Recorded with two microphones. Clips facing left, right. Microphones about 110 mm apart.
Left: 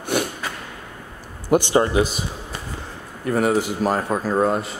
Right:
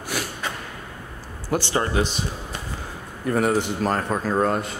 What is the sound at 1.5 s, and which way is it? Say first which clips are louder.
Speech: left 6 dB; 15° left (ahead or behind).